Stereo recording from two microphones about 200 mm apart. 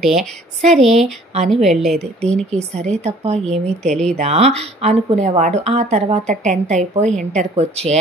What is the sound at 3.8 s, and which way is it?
Speech, 5° left (ahead or behind).